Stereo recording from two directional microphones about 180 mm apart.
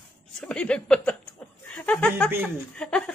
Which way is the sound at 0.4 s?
5° left (ahead or behind).